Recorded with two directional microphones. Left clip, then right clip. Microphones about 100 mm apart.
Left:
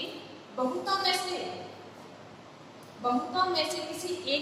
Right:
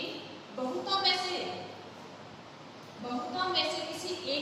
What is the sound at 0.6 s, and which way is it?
Speech, 25° right (ahead or behind).